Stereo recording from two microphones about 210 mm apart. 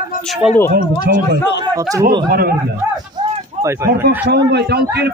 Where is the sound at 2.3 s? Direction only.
45° right (ahead or behind).